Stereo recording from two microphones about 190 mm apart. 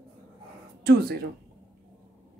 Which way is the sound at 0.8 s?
55° right (ahead or behind).